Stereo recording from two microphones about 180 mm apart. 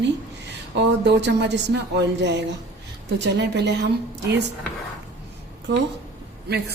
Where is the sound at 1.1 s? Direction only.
70° right (ahead or behind).